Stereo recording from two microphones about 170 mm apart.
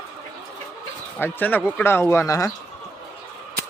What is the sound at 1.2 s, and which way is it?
Speech, 10° left (ahead or behind).